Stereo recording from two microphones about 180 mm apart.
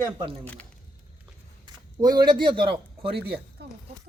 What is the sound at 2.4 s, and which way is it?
Speech, 25° right (ahead or behind).